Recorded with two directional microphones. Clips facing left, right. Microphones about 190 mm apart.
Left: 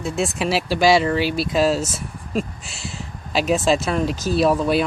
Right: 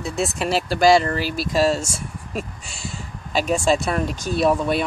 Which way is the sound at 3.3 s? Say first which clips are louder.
Left 1 dB; 5° left (ahead or behind).